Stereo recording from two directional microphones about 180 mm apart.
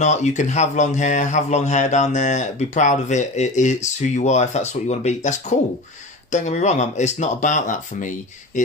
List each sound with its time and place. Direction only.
0.0 s a man's voice: 40° left (ahead or behind)